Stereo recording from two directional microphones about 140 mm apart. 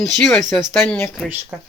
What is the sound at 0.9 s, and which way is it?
Speech, 15° left (ahead or behind).